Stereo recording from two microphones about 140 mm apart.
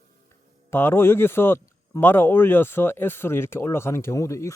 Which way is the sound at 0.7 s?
15° left (ahead or behind).